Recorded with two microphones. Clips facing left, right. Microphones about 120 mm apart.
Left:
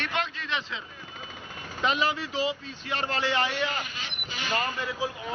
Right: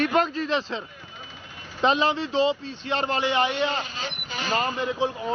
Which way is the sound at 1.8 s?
25° right (ahead or behind).